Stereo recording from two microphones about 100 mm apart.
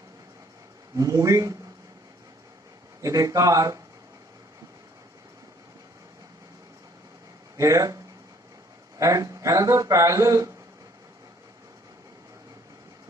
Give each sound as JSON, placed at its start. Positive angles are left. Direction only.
{"t": 0.9, "sound": "speech", "side_deg": -35}
{"t": 3.0, "sound": "speech", "side_deg": -35}
{"t": 7.5, "sound": "speech", "side_deg": -35}